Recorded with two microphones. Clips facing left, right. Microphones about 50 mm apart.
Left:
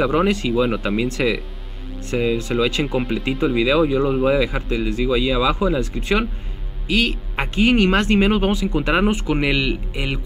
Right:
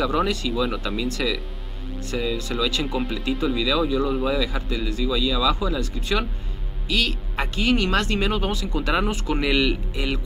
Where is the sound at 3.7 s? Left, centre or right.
Left.